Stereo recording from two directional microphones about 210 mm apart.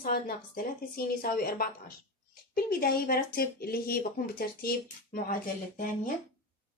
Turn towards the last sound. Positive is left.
turn(degrees=40)  # may be behind; listen again after turning